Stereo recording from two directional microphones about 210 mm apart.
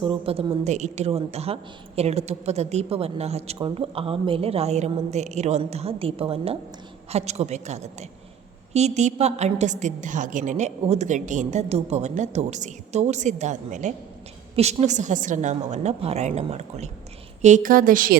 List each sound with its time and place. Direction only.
0.0 s a woman's voice: 25° right (ahead or behind); by 18.2 s 40° right (ahead or behind)